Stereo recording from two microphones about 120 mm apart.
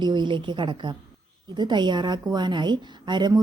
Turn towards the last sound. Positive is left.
turn(degrees=-35)  # may be behind; listen again after turning